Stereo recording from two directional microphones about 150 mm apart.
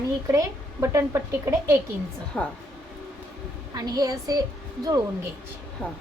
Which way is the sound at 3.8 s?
25° right (ahead or behind).